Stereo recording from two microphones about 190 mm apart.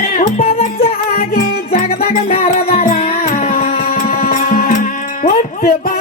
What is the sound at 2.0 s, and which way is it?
Music, 35° left (ahead or behind).